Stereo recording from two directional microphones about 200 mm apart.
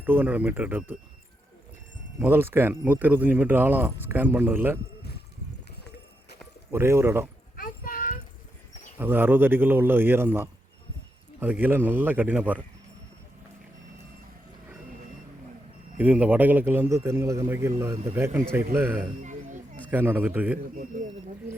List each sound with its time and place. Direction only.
0.0 s speech: 10° right (ahead or behind)
2.1 s speech: 10° right (ahead or behind)
6.7 s speech: 15° right (ahead or behind)
7.5 s a sound: 45° left (ahead or behind)
9.0 s speech: 10° right (ahead or behind)
16.0 s speech: 10° right (ahead or behind)
18.9 s music: 40° right (ahead or behind)
19.9 s speech: 10° right (ahead or behind)
20.7 s speech: 40° right (ahead or behind)